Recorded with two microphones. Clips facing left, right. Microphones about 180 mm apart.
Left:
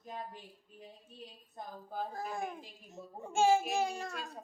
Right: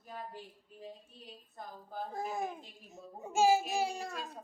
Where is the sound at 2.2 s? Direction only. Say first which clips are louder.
Right 2 dB; 5° right (ahead or behind).